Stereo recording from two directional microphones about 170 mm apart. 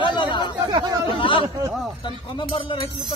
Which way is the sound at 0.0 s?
30° left (ahead or behind).